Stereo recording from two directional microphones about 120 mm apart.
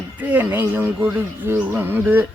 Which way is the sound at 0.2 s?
15° right (ahead or behind).